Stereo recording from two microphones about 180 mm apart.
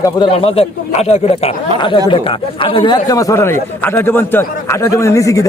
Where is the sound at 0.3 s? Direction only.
35° left (ahead or behind).